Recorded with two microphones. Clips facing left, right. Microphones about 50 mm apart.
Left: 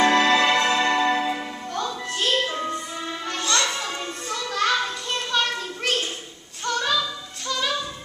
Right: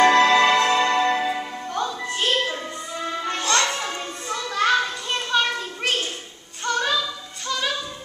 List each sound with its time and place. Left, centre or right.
0.1 s music: centre
1.7 s music: centre
3.3 s music: right
4.3 s children playing: centre
6.6 s child singing: centre